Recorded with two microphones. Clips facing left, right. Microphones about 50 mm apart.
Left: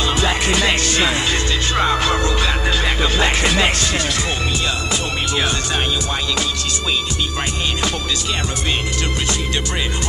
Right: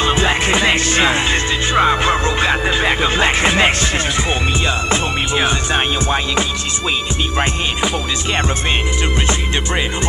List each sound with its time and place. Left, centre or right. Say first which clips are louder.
0.0 s music: right 3 dB; right